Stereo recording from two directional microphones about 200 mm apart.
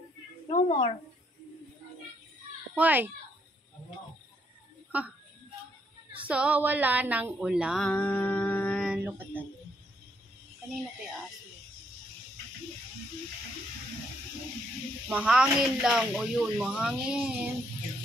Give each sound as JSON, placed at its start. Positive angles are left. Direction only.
{"t": 0.5, "sound": "a woman's voice", "side_deg": 25}
{"t": 2.7, "sound": "a child's voice", "side_deg": -10}
{"t": 6.2, "sound": "a sound", "side_deg": -5}
{"t": 8.8, "sound": "speech", "side_deg": -5}
{"t": 15.0, "sound": "speech", "side_deg": -5}